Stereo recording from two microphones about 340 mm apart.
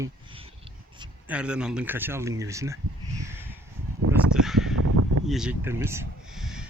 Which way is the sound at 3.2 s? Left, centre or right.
Centre.